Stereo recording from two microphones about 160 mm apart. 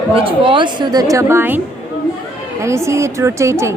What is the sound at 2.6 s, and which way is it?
A woman's voice, 15° right (ahead or behind).